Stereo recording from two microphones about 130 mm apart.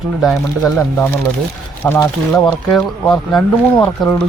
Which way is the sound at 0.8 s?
15° left (ahead or behind).